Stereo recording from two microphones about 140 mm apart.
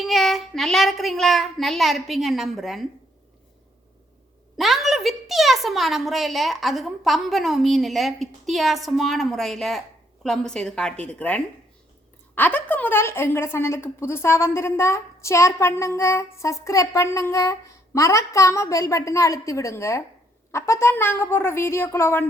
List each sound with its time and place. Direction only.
0.0 s a woman's voice: centre (ahead or behind)
4.5 s a woman's voice: centre (ahead or behind); by 22.2 s 15° left (ahead or behind)